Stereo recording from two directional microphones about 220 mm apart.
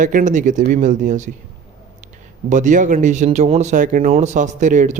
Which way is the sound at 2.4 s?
35° right (ahead or behind).